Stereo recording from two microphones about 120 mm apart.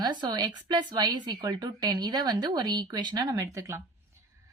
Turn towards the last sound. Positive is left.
turn(degrees=-25)  # may be behind; listen again after turning